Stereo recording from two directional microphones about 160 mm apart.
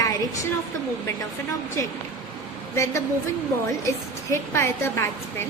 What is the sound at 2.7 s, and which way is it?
Speech, 20° left (ahead or behind).